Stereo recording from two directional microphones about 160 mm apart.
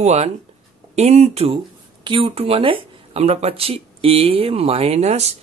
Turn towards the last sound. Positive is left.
turn(degrees=-45)  # may be behind; listen again after turning